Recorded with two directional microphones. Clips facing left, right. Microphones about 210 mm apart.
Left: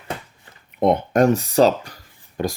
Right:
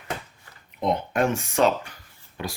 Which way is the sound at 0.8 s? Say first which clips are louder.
Left 7 dB; 55° left (ahead or behind).